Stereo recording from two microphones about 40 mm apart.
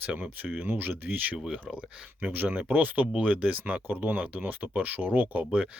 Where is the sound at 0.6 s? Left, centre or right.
Right.